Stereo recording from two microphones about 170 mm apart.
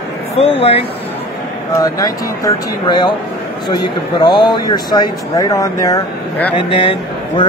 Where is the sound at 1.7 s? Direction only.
20° left (ahead or behind).